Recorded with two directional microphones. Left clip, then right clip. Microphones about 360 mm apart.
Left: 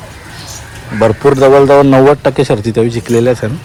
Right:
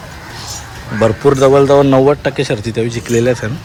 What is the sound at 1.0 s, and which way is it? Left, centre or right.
Speech, centre.